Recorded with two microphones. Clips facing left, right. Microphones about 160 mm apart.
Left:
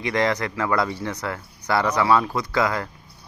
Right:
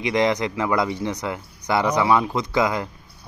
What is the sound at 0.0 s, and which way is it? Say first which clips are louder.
Speech: right 2 dB; 15° right (ahead or behind).